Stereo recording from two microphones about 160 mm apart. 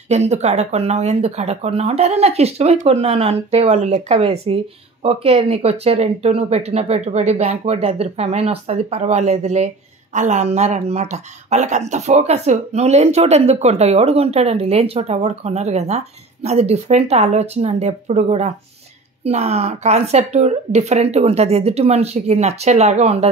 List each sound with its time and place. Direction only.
0.1 s speech: 45° right (ahead or behind)